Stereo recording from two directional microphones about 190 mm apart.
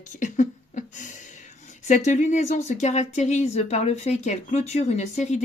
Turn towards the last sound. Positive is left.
turn(degrees=40)  # may be behind; listen again after turning